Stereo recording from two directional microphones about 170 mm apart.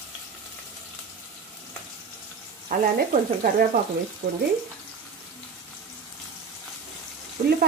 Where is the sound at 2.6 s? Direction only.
50° right (ahead or behind).